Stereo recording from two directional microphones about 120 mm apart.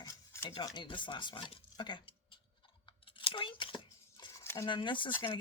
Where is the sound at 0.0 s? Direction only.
25° left (ahead or behind).